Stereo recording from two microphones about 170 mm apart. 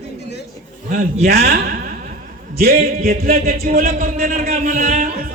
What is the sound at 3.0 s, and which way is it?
Music, 60° right (ahead or behind).